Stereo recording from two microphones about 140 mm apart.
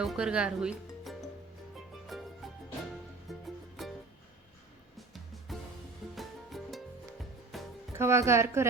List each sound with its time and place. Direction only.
0.0 s speech: 5° right (ahead or behind)
2.0 s music: centre (ahead or behind)
4.9 s music: centre (ahead or behind)
7.9 s speech: 20° right (ahead or behind)